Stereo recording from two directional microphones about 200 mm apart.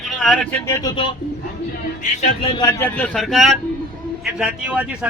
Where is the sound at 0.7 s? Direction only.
20° left (ahead or behind).